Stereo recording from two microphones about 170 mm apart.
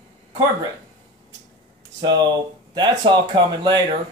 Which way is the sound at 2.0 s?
25° right (ahead or behind).